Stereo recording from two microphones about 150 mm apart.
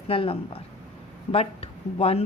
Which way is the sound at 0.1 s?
40° left (ahead or behind).